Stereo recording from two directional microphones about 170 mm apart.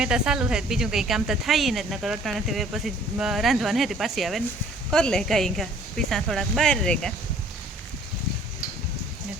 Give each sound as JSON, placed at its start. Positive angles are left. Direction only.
{"t": 0.0, "sound": "speech", "side_deg": -5}